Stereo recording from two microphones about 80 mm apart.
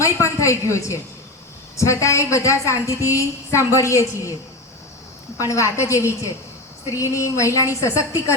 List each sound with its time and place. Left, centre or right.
0.0 s a woman's voice: left
5.4 s a woman's voice: left